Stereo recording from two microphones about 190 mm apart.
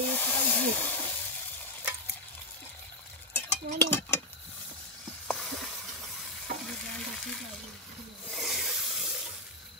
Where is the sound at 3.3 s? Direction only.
10° left (ahead or behind).